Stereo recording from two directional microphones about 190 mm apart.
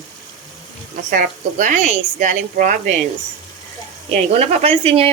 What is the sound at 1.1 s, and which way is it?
Speech, 45° right (ahead or behind).